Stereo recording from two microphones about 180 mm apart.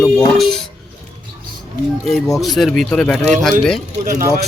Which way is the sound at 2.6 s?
Centre (ahead or behind).